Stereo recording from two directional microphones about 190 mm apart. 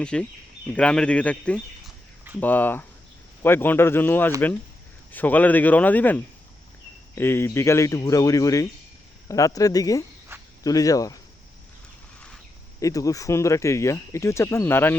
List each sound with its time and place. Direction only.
0.0 s speech: 5° left (ahead or behind)
12.8 s speech: 20° left (ahead or behind)